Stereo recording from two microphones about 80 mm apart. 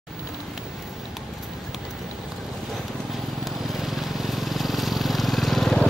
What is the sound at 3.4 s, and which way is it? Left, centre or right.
Vehicle, centre.